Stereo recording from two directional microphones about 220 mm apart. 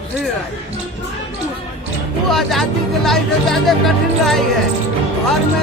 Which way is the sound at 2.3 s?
Centre (ahead or behind).